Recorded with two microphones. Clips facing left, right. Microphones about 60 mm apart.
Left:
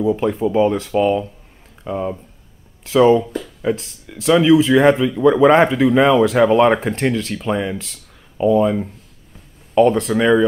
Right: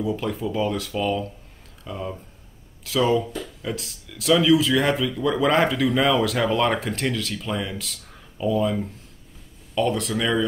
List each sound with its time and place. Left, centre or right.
0.0 s speech: left